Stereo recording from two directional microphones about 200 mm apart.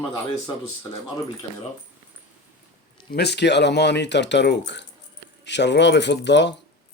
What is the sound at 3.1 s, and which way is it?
Speech, 55° left (ahead or behind).